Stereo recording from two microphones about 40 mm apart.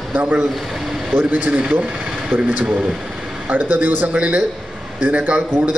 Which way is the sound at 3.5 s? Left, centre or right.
Right.